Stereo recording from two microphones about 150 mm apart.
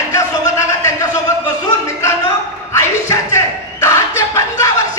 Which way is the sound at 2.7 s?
20° left (ahead or behind).